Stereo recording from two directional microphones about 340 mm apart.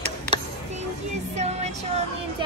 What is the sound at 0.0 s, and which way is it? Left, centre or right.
Tick, centre.